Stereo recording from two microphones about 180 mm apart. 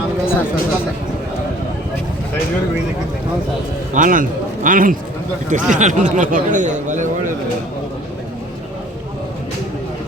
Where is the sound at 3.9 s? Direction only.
50° right (ahead or behind).